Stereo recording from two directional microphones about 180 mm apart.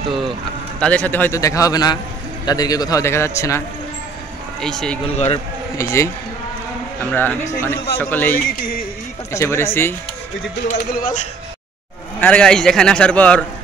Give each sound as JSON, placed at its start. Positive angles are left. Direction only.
{"t": 0.7, "sound": "a man's voice", "side_deg": 5}
{"t": 4.6, "sound": "a man's voice", "side_deg": 5}
{"t": 5.1, "sound": "a man's voice", "side_deg": 40}
{"t": 5.8, "sound": "a man's voice", "side_deg": 15}
{"t": 8.5, "sound": "music", "side_deg": 55}
{"t": 9.3, "sound": "a man's voice", "side_deg": 15}
{"t": 10.7, "sound": "speech", "side_deg": 45}
{"t": 12.2, "sound": "a man's voice", "side_deg": 5}